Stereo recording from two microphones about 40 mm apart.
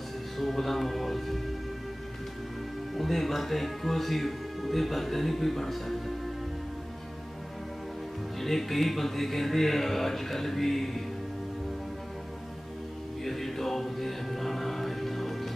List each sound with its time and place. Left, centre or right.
0.4 s music: centre
3.0 s speech: centre
8.4 s speech: centre
13.2 s music: centre